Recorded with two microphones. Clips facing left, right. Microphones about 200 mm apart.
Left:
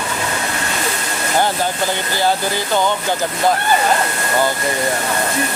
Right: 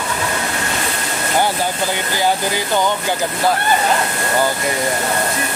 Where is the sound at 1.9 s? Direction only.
15° right (ahead or behind).